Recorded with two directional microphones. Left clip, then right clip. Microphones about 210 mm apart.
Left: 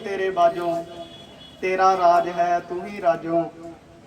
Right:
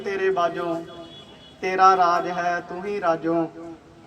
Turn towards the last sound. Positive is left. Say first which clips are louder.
# left 1 dB
turn(degrees=-40)  # may be behind; listen again after turning